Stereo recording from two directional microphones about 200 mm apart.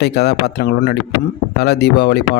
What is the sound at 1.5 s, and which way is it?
Speech, 55° left (ahead or behind).